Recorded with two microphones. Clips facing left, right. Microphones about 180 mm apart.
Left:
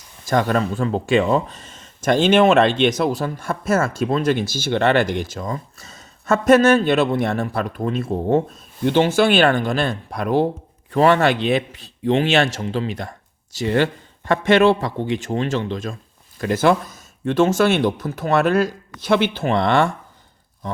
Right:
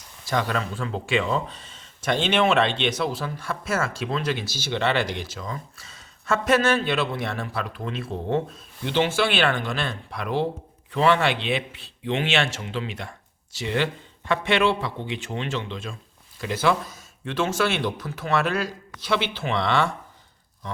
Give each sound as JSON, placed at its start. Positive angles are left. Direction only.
{"t": 0.3, "sound": "speech", "side_deg": 45}